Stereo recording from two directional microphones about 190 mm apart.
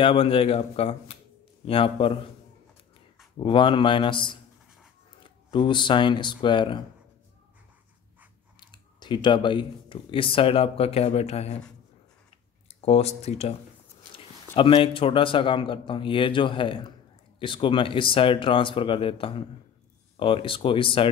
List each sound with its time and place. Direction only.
0.0 s a man's voice: 30° left (ahead or behind)
3.3 s a man's voice: 25° left (ahead or behind)
8.5 s speech: 25° left (ahead or behind)
12.8 s a man's voice: 35° left (ahead or behind)